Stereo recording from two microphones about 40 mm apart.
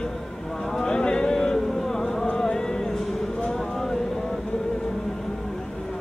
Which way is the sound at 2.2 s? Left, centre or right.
Centre.